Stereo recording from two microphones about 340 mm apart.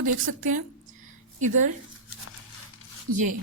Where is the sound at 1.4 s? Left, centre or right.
Right.